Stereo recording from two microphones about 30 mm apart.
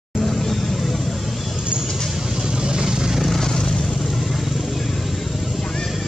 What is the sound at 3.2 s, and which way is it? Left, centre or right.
Vehicle, centre.